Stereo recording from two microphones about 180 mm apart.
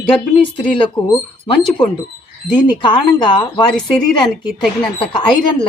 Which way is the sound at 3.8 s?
5° left (ahead or behind).